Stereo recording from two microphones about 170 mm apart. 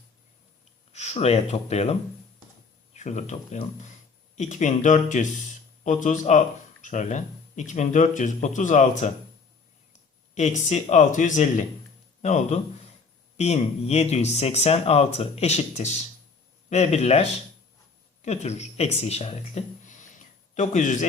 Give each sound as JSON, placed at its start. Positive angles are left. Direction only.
{"t": 0.9, "sound": "speech", "side_deg": 40}
{"t": 10.3, "sound": "speech", "side_deg": 45}